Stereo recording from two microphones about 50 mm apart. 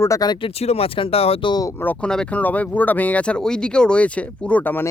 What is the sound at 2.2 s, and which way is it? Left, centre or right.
Speech, left.